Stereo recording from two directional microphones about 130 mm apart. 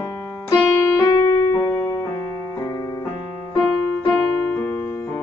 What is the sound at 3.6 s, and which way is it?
Keyboard, 10° left (ahead or behind).